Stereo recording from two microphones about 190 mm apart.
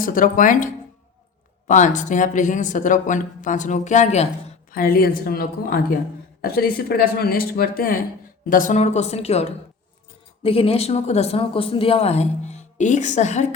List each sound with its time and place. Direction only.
0.0 s speech: 45° left (ahead or behind)
4.7 s speech: 50° left (ahead or behind)